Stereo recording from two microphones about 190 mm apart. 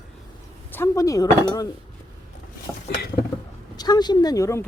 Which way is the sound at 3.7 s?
20° left (ahead or behind).